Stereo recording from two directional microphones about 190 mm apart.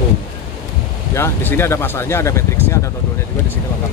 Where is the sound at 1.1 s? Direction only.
15° left (ahead or behind).